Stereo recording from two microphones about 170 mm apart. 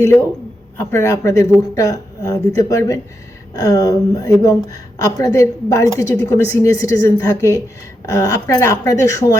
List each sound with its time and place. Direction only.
0.9 s a woman's voice: 15° left (ahead or behind)